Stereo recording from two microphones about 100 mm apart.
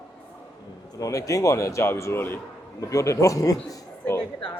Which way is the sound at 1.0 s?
35° left (ahead or behind).